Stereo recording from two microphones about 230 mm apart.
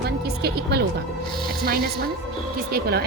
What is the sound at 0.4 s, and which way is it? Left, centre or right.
A woman's voice, right.